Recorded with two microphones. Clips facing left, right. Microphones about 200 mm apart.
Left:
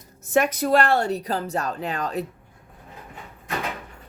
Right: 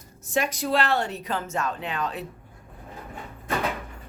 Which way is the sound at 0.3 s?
50° left (ahead or behind).